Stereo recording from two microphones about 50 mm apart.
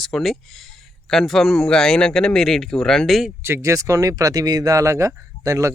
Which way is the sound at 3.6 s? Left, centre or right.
Right.